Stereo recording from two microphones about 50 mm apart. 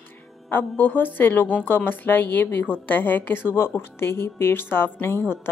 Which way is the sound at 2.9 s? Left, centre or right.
Left.